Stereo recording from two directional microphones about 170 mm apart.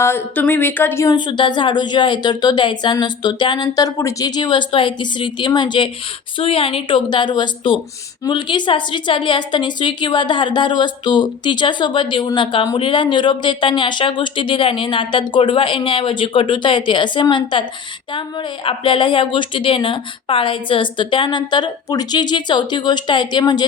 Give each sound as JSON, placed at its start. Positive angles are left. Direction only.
{"t": 0.0, "sound": "speech", "side_deg": 10}
{"t": 1.1, "sound": "a woman's voice", "side_deg": 25}